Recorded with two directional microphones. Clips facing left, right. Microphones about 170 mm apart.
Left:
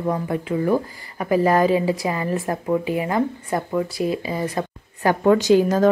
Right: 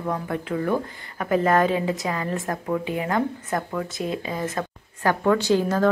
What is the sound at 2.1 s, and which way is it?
A woman's voice, 15° left (ahead or behind).